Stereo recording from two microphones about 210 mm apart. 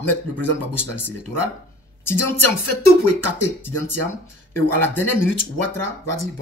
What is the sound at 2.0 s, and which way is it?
Speech, 10° left (ahead or behind).